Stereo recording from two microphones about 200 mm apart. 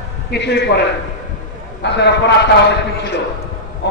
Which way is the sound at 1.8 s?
60° left (ahead or behind).